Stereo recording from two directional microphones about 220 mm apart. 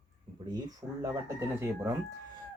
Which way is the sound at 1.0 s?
10° right (ahead or behind).